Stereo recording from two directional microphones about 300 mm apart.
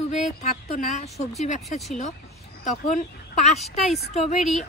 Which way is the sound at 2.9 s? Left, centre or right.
Left.